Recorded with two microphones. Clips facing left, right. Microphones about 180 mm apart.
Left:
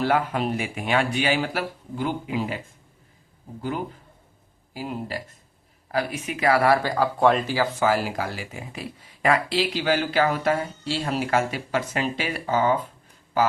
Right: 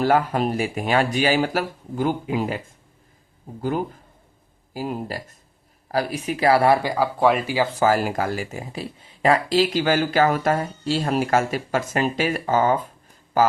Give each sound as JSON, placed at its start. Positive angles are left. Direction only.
{"t": 0.0, "sound": "speech", "side_deg": -40}
{"t": 4.7, "sound": "speech", "side_deg": -45}
{"t": 6.8, "sound": "speech", "side_deg": -10}
{"t": 7.8, "sound": "speech", "side_deg": -45}
{"t": 8.7, "sound": "speech", "side_deg": -30}